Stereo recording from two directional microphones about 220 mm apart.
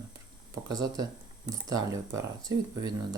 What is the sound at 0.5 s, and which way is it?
Speech, 15° right (ahead or behind).